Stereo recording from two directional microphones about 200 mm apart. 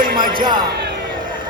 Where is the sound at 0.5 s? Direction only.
55° right (ahead or behind).